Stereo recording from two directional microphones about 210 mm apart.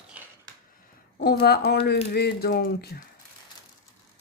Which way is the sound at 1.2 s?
45° left (ahead or behind).